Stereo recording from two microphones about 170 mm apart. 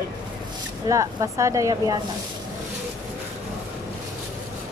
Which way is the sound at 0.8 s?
20° right (ahead or behind).